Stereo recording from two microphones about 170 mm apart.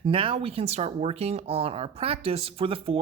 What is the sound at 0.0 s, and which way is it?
Speech, 30° right (ahead or behind).